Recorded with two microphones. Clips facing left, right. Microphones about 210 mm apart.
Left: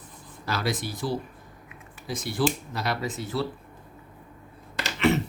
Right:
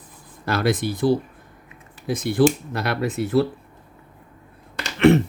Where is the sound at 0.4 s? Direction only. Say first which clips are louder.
Right 8 dB; 55° right (ahead or behind).